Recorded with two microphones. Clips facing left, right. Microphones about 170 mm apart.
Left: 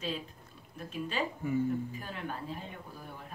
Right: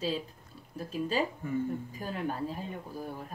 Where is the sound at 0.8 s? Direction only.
35° right (ahead or behind).